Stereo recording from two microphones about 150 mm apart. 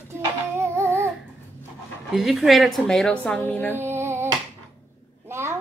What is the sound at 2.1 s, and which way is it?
A woman's voice, centre (ahead or behind).